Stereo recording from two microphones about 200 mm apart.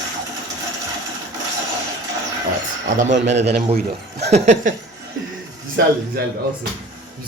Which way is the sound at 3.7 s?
55° right (ahead or behind).